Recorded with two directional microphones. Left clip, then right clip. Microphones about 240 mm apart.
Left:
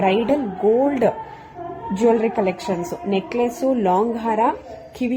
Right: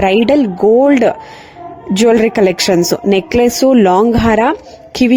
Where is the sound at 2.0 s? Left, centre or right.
Right.